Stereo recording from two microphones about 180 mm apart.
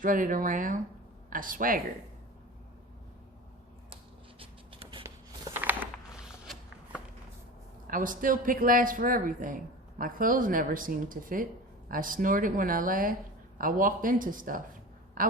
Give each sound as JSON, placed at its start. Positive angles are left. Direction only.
{"t": 0.0, "sound": "speech", "side_deg": -50}
{"t": 4.4, "sound": "writing", "side_deg": -30}
{"t": 5.5, "sound": "a sound", "side_deg": -10}
{"t": 7.9, "sound": "speech", "side_deg": -50}